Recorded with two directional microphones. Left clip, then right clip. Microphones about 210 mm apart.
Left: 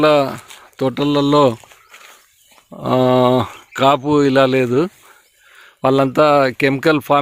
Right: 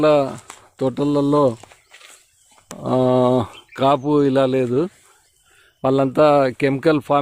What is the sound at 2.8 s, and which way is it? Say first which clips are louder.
Speech: left 3 dB; 5° left (ahead or behind).